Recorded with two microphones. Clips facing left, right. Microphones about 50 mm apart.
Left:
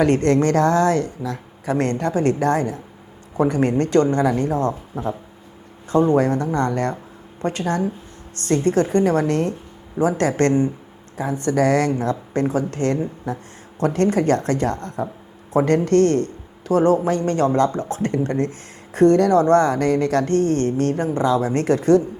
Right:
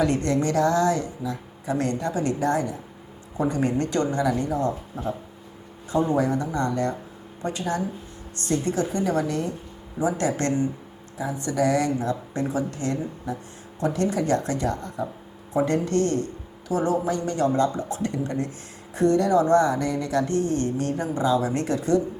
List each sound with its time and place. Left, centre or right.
0.0 s speech: left
4.9 s speech: left
10.0 s speech: left